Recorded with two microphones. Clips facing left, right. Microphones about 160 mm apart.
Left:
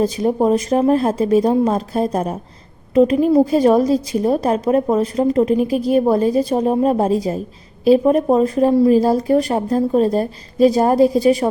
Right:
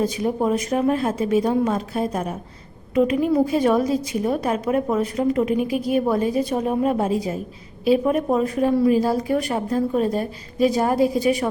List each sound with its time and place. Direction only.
0.0 s a woman's voice: 35° left (ahead or behind)